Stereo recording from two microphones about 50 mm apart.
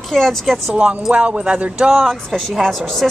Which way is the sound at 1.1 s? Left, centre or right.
Right.